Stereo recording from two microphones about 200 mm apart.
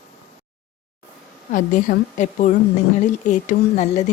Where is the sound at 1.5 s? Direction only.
40° left (ahead or behind).